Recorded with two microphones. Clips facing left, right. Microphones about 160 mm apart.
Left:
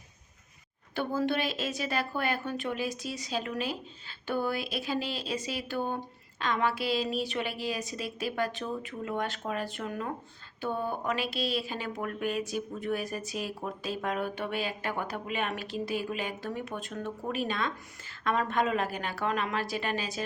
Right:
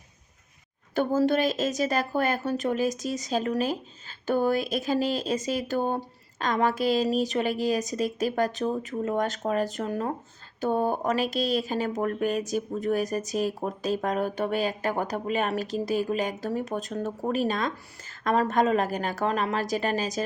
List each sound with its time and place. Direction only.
0.9 s speech: 40° right (ahead or behind)